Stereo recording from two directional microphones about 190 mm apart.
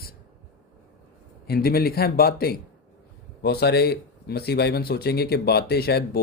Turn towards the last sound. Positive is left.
turn(degrees=55)  # may be behind; listen again after turning